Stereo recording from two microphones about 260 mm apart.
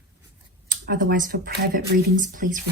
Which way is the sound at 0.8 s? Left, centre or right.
Right.